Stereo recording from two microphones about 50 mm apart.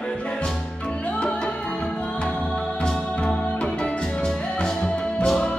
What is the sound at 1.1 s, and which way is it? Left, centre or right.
Music, centre.